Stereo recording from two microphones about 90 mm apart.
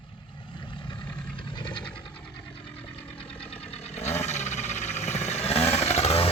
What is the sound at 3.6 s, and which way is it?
Vehicle, 90° left.